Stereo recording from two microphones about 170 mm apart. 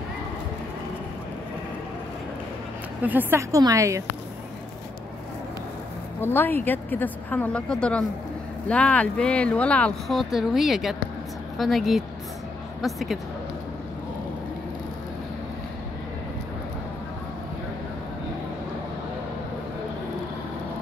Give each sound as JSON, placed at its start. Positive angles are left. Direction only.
{"t": 3.0, "sound": "a woman's voice", "side_deg": -10}
{"t": 6.2, "sound": "speech", "side_deg": 10}